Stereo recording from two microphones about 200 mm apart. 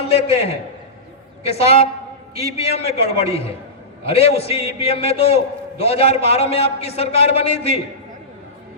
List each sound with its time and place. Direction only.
0.1 s a man's voice: 30° left (ahead or behind)
1.5 s a man's voice: 30° left (ahead or behind)